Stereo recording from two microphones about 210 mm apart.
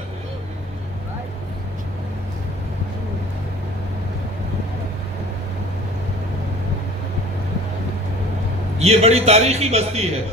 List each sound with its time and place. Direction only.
8.8 s a man's voice: 30° right (ahead or behind)